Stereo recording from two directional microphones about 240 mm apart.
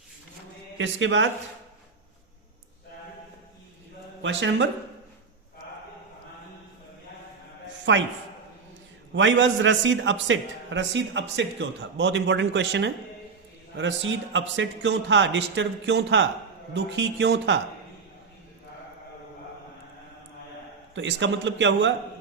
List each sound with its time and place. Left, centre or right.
0.8 s a man's voice: right
4.2 s a man's voice: right
7.9 s a man's voice: right
9.1 s a man's voice: right
20.9 s a man's voice: right